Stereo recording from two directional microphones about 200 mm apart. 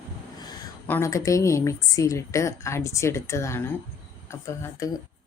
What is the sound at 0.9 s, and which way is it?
A woman's voice, 15° left (ahead or behind).